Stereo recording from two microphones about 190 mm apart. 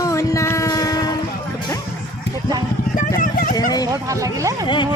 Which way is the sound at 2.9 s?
45° left (ahead or behind).